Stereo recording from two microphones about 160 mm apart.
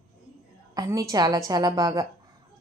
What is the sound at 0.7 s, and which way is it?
A woman's voice, 20° right (ahead or behind).